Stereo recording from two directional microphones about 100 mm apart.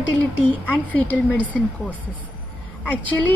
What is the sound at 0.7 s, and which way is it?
Speech, 15° left (ahead or behind).